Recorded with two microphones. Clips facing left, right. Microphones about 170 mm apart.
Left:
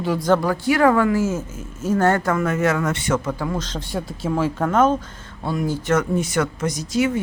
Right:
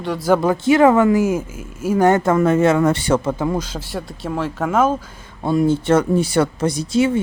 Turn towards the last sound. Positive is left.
turn(degrees=-30)  # may be behind; listen again after turning